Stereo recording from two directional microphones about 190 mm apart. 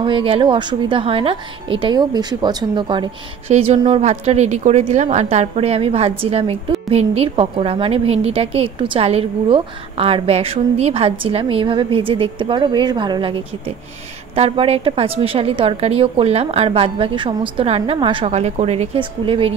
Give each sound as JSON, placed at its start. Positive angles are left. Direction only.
{"t": 0.0, "sound": "a woman's voice", "side_deg": -25}